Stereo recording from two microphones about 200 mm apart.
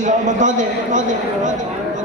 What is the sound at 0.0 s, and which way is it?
A man's voice, 40° right (ahead or behind).